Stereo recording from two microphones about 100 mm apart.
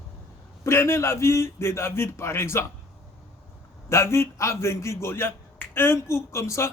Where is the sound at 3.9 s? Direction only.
25° left (ahead or behind).